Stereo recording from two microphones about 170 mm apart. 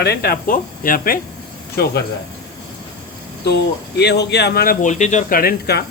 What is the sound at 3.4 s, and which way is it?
Speech, 80° left.